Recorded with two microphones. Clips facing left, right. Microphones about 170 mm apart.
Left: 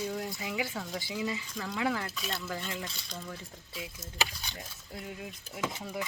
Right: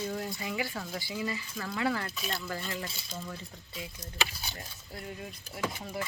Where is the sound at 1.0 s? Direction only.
15° left (ahead or behind).